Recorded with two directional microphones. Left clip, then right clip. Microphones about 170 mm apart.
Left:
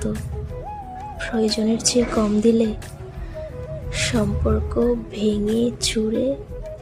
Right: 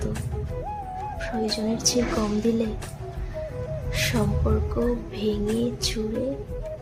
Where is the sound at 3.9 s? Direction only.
20° left (ahead or behind).